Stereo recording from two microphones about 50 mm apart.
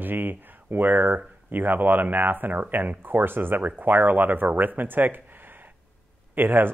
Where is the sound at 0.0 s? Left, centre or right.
Right.